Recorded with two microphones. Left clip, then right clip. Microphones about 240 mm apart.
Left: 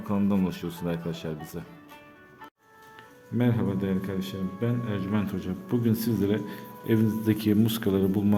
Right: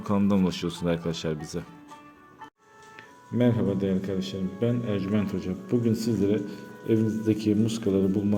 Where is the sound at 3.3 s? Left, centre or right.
Centre.